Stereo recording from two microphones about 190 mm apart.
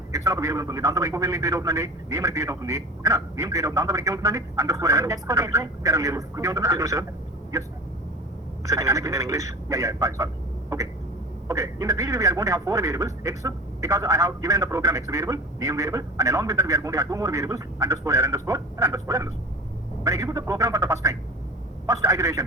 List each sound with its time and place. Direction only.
0.1 s a man's voice: 15° right (ahead or behind)
8.6 s a man's voice: 15° right (ahead or behind)
10.7 s a sound: 15° right (ahead or behind)
11.4 s a man's voice: 15° right (ahead or behind)